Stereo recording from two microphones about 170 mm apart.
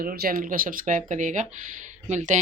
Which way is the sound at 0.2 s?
55° right (ahead or behind).